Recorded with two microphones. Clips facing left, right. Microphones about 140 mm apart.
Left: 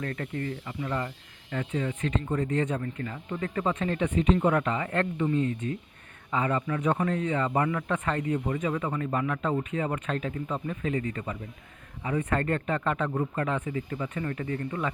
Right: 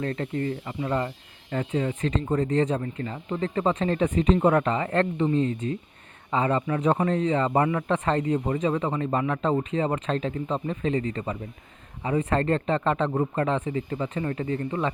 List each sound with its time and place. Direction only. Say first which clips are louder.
0.0 s speech: right 5 dB; 30° right (ahead or behind)